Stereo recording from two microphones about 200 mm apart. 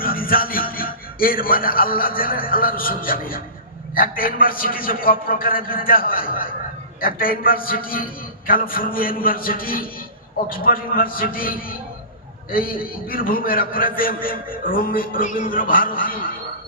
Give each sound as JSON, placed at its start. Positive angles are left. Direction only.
{"t": 0.0, "sound": "a man's voice", "side_deg": 45}